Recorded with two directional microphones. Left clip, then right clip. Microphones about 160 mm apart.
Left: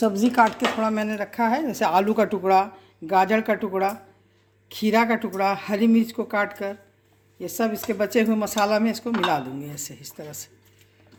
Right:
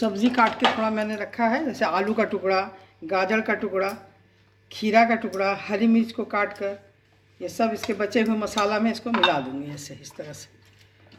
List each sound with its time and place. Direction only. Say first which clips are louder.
0.0 s speech: left 3 dB; 55° left (ahead or behind)
0.5 s speech: right 1 dB; 65° left (ahead or behind)
4.7 s speech: right 2 dB; 90° left